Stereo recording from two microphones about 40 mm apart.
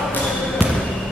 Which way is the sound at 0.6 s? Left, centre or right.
Right.